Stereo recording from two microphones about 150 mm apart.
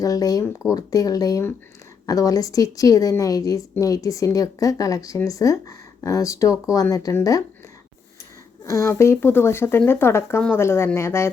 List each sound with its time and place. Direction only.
0.0 s a woman's voice: 25° left (ahead or behind)
8.6 s speech: 20° left (ahead or behind)